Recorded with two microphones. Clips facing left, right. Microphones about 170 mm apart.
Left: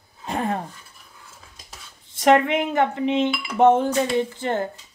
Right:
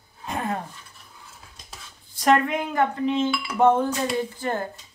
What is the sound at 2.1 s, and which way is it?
Speech, 20° left (ahead or behind).